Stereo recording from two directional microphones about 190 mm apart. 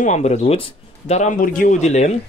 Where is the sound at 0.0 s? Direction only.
35° left (ahead or behind).